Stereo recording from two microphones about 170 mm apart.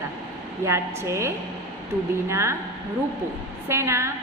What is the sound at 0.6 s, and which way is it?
A woman's voice, 15° right (ahead or behind).